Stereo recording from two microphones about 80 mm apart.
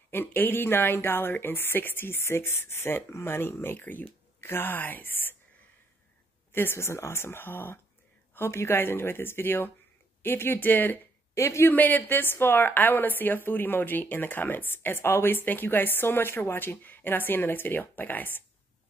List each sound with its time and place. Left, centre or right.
0.1 s a woman's voice: left
6.5 s a woman's voice: left
11.3 s speech: left
11.7 s a woman's voice: left